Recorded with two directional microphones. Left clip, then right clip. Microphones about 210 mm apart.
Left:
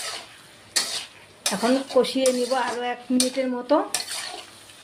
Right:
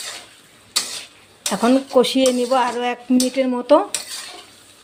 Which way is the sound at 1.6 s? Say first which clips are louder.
Right 5 dB; 30° right (ahead or behind).